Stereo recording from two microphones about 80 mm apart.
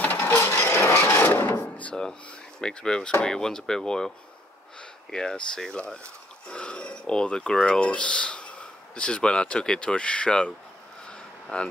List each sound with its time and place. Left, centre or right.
0.0 s wood: left
2.6 s speech: centre
5.1 s speech: centre
11.1 s a sound: centre